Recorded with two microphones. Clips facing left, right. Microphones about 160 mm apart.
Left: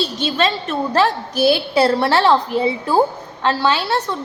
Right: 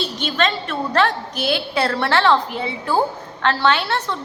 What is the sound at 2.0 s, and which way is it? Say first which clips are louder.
Speech: left 2 dB; 35° left (ahead or behind).